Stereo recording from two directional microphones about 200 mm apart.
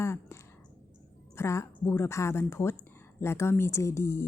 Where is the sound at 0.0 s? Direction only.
15° left (ahead or behind).